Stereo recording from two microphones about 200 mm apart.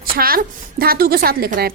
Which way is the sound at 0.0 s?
45° right (ahead or behind).